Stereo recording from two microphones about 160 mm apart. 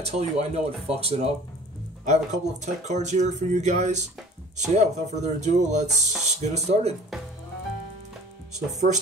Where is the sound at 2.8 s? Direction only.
45° right (ahead or behind).